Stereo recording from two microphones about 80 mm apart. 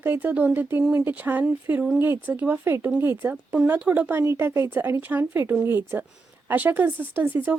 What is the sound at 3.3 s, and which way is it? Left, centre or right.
Speech, centre.